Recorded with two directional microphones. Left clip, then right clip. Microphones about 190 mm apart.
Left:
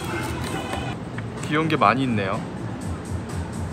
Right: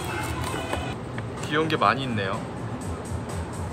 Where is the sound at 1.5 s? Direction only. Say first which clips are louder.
Left 3 dB; 15° right (ahead or behind).